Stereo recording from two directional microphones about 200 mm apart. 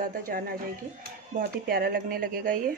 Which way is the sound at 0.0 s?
45° right (ahead or behind).